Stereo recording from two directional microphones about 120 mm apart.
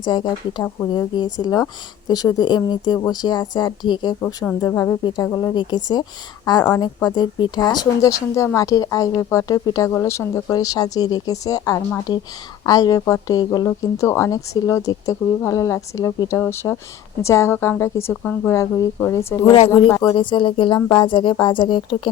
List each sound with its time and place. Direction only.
0.0 s speech: 40° left (ahead or behind)
4.6 s speech: 20° left (ahead or behind)
19.5 s speech: 55° left (ahead or behind)
20.0 s speech: 40° left (ahead or behind)